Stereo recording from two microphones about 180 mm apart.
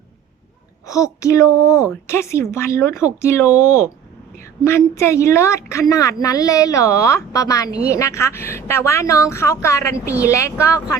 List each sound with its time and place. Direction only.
0.9 s a woman's voice: 20° left (ahead or behind)